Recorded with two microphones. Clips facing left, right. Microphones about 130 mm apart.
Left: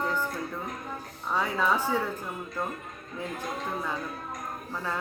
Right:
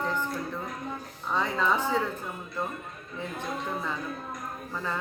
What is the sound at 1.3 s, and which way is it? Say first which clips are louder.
Speech: even; 10° left (ahead or behind).